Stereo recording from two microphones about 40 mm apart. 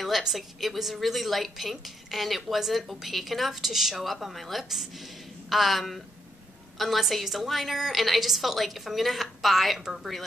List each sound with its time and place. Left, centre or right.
0.0 s a woman's voice: centre